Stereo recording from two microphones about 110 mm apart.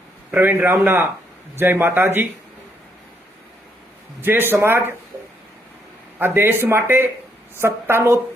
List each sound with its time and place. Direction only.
0.3 s speech: 20° right (ahead or behind)
4.2 s speech: 20° right (ahead or behind)
6.1 s speech: 20° right (ahead or behind)